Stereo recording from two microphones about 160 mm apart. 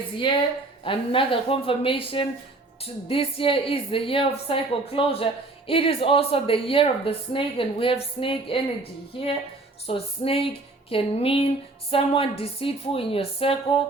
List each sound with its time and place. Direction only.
0.9 s speech: 35° left (ahead or behind)